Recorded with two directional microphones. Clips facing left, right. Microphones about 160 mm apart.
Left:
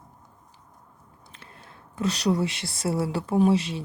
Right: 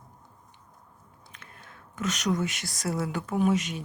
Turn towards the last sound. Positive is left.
turn(degrees=30)  # may be behind; listen again after turning